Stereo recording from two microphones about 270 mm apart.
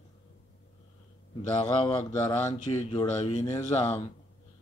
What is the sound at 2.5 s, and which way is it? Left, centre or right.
Speech, left.